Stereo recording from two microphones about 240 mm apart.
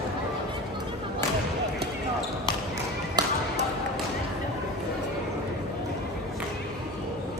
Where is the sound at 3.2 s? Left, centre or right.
Centre.